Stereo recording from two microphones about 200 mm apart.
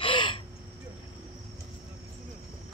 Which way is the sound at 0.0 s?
25° left (ahead or behind).